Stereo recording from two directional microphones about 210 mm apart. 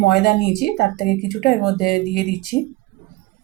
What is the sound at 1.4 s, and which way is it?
Speech, 45° left (ahead or behind).